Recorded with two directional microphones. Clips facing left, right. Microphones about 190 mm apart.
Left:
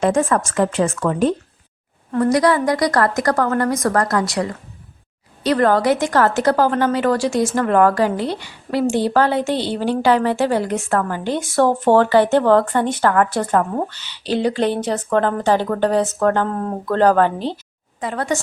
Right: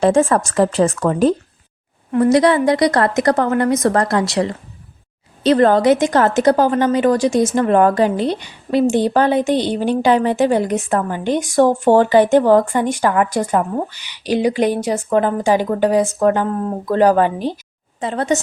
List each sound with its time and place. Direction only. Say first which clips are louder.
0.0 s a woman's voice: right 3 dB; 30° right (ahead or behind)
2.1 s a woman's voice: right 3 dB; 25° right (ahead or behind)
18.0 s a woman's voice: right 3 dB; 25° right (ahead or behind)